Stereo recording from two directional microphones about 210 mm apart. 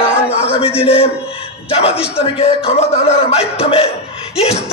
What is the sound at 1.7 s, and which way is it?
Speech, 30° left (ahead or behind).